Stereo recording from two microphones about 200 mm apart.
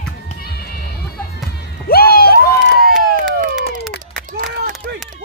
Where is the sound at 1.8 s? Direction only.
50° left (ahead or behind).